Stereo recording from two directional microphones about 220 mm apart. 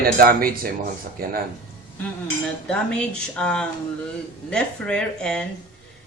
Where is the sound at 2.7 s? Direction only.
5° left (ahead or behind).